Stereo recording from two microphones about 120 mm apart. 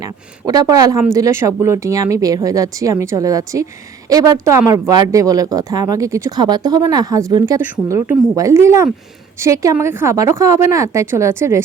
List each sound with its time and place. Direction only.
0.0 s speech: 30° right (ahead or behind)
6.3 s speech: 35° right (ahead or behind)
7.6 s speech: 15° right (ahead or behind)